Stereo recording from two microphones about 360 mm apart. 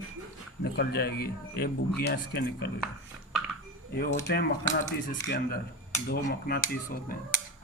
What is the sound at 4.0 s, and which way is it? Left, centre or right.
A man's voice, left.